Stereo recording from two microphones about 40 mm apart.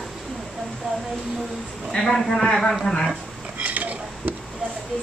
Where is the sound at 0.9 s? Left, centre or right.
Right.